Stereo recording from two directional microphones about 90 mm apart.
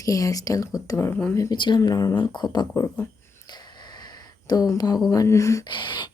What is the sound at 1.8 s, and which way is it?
Speech, 40° left (ahead or behind).